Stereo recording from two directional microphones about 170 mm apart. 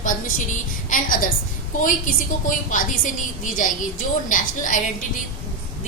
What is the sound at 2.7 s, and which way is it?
A woman's voice, 50° left (ahead or behind).